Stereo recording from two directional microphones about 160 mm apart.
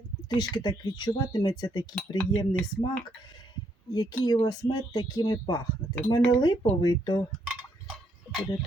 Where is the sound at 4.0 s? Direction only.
25° left (ahead or behind).